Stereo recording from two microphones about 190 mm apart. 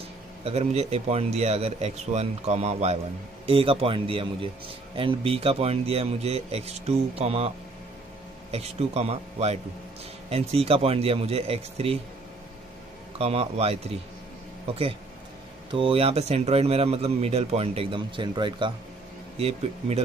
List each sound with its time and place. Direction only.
0.4 s a man's voice: 30° right (ahead or behind)
13.2 s a man's voice: 30° right (ahead or behind)
15.7 s a man's voice: 30° right (ahead or behind)